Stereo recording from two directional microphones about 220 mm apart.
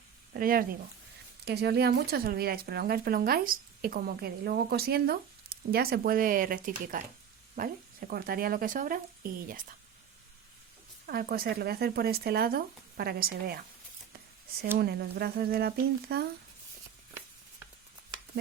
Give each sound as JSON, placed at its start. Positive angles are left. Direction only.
{"t": 0.3, "sound": "speech", "side_deg": -40}
{"t": 11.0, "sound": "speech", "side_deg": -45}
{"t": 14.8, "sound": "speech", "side_deg": -45}